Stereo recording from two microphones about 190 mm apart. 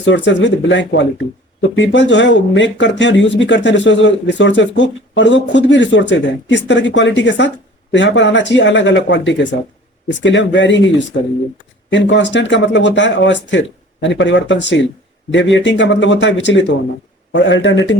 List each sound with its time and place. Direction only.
0.0 s speech: 70° left (ahead or behind)